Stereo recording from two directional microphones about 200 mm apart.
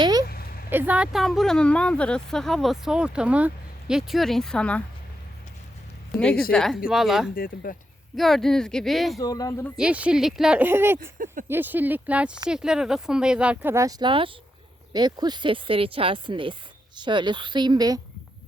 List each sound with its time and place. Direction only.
0.0 s a sound: 20° right (ahead or behind)
0.3 s a sound: 50° left (ahead or behind)
0.7 s speech: 10° right (ahead or behind)
6.1 s speech: 5° left (ahead or behind)
7.3 s speech: 45° left (ahead or behind)
8.1 s speech: centre (ahead or behind)
9.1 s speech: 20° left (ahead or behind)
9.7 s speech: 5° right (ahead or behind)